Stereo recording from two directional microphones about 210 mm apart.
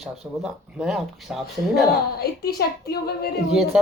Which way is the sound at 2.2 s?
50° left (ahead or behind).